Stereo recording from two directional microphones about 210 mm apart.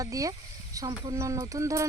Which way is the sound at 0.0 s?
15° right (ahead or behind).